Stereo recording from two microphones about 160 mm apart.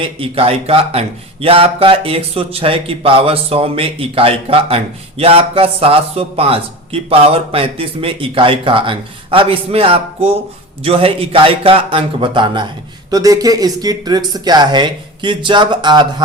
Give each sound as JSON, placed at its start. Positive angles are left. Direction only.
{"t": 0.0, "sound": "speech", "side_deg": -35}